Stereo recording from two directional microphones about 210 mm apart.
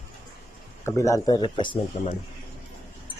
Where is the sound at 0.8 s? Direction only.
15° left (ahead or behind).